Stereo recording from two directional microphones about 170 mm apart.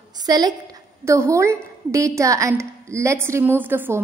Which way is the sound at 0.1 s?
25° right (ahead or behind).